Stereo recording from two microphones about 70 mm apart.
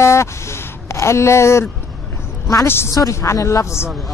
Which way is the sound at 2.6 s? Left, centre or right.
Left.